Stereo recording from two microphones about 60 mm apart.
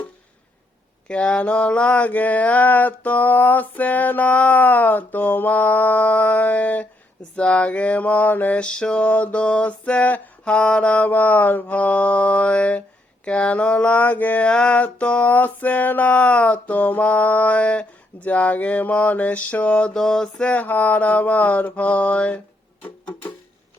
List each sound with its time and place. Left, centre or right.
1.0 s mantra: centre
8.6 s mantra: centre
19.9 s mantra: centre
20.5 s mantra: left
22.8 s music: left